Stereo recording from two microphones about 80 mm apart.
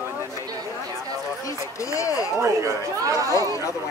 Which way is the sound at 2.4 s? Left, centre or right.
Right.